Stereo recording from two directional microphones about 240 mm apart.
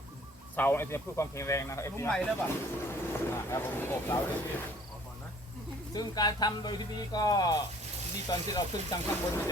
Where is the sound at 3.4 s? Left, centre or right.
Centre.